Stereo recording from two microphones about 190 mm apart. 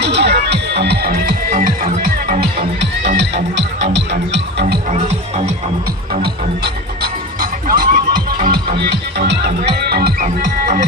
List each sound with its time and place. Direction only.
0.0 s music: 60° right (ahead or behind)
3.2 s music: 65° right (ahead or behind)
4.6 s music: 40° right (ahead or behind)
6.1 s music: 55° right (ahead or behind)
8.7 s music: 60° right (ahead or behind); by 10.8 s 40° right (ahead or behind)